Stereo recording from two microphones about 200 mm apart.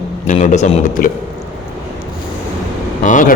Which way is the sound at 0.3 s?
35° left (ahead or behind).